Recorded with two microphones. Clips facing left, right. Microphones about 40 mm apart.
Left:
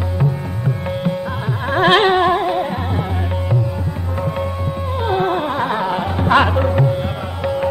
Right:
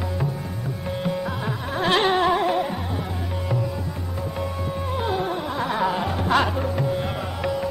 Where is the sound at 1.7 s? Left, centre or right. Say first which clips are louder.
Left 8 dB; left.